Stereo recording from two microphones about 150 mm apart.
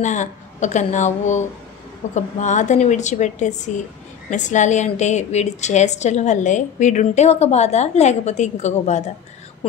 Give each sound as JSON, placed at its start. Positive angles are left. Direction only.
{"t": 0.0, "sound": "a woman's voice", "side_deg": 50}